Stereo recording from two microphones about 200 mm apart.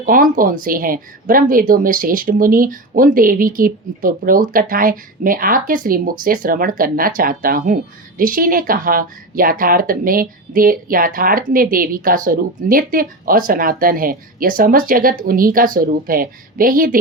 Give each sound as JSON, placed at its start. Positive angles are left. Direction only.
{"t": 0.0, "sound": "a woman's voice", "side_deg": -45}